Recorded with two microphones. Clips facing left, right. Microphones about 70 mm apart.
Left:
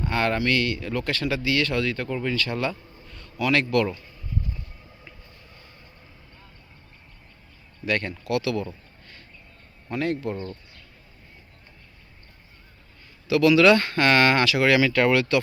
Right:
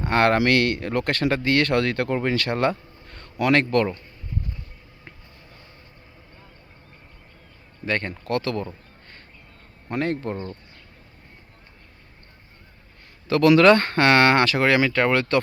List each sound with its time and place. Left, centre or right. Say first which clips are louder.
0.0 s speech: right 5 dB; right
7.9 s speech: even; right
9.9 s speech: right 1 dB; right
13.2 s speech: right 2 dB; right